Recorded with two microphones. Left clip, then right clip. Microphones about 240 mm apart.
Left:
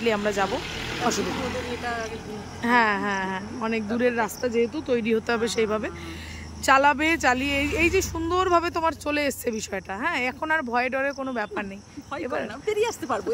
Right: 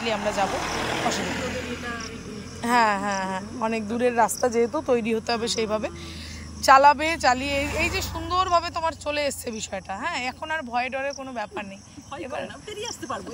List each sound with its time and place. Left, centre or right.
0.0 s a woman's voice: centre
2.6 s a woman's voice: centre